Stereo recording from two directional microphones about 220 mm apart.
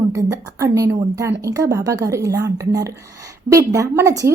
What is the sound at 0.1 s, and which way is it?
A woman's voice, 15° right (ahead or behind).